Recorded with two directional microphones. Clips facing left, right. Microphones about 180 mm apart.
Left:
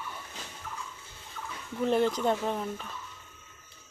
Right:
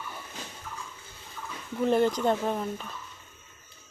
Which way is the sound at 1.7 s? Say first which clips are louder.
Right 2 dB; centre (ahead or behind).